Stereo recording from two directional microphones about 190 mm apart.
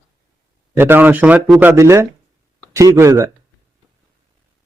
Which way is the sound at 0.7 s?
10° right (ahead or behind).